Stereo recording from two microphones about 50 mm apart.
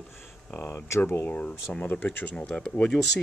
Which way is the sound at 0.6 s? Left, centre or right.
Left.